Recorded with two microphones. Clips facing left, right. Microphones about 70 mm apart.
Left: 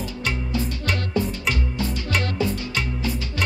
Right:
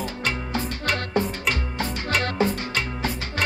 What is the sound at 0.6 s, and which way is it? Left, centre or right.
Music, right.